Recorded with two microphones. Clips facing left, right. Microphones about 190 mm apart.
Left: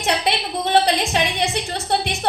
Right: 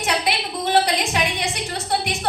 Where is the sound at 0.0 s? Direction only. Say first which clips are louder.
Left 2 dB; 25° left (ahead or behind).